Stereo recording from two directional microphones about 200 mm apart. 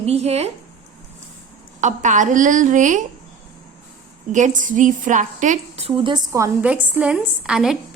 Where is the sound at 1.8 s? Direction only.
40° right (ahead or behind).